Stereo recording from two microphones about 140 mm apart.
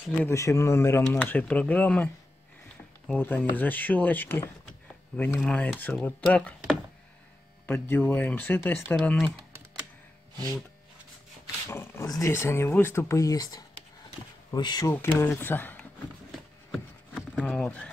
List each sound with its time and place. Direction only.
0.3 s speech: 20° left (ahead or behind)
3.1 s speech: 10° left (ahead or behind)
7.6 s speech: 15° left (ahead or behind)
11.7 s speech: 20° left (ahead or behind)
14.9 s speech: 15° left (ahead or behind)
16.3 s a sound: centre (ahead or behind)